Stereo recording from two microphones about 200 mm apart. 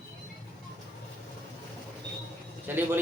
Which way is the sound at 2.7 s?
10° right (ahead or behind).